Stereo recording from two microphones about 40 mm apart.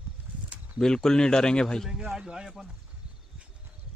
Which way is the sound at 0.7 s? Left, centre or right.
Centre.